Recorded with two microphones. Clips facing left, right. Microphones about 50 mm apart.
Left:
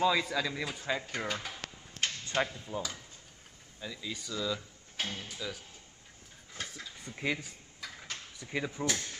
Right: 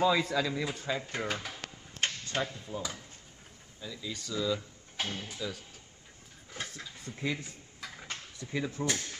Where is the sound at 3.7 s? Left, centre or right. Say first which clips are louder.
Even; centre.